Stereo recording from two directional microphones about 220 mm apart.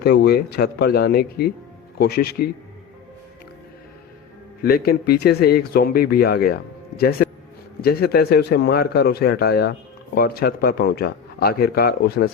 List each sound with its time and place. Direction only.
0.0 s speech: 45° left (ahead or behind)
4.6 s speech: 45° left (ahead or behind)